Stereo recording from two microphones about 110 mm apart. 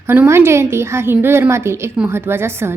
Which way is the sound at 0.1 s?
20° right (ahead or behind).